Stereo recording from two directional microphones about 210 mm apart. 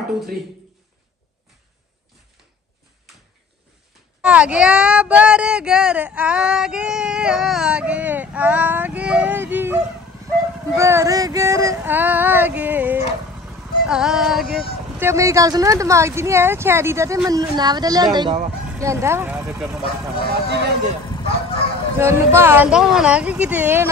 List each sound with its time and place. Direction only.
4.2 s speech: 5° right (ahead or behind)
15.0 s speech: 15° right (ahead or behind)
20.2 s speech: 50° right (ahead or behind)
21.9 s speech: 10° right (ahead or behind)